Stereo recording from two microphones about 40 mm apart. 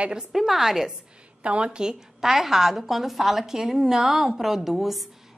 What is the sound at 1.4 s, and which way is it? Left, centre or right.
Speech, right.